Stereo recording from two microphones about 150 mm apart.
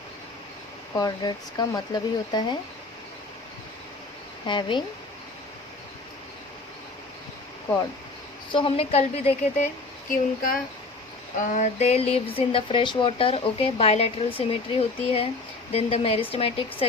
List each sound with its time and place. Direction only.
0.9 s speech: 25° left (ahead or behind)
4.4 s speech: 30° left (ahead or behind)
8.5 s a woman's voice: 40° left (ahead or behind)
10.1 s speech: 65° left (ahead or behind)
11.5 s speech: 50° left (ahead or behind)